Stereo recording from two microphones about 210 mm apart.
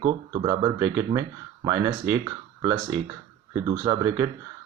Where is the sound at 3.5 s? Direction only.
15° right (ahead or behind).